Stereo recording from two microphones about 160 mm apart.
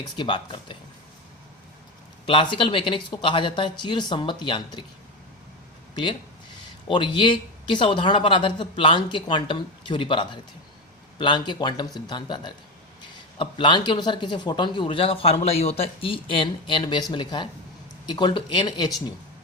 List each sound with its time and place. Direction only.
0.0 s speech: 30° left (ahead or behind)
2.2 s speech: 30° left (ahead or behind)
6.8 s speech: 30° left (ahead or behind)